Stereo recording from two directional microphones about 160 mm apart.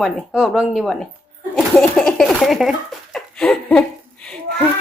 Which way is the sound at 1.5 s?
5° left (ahead or behind).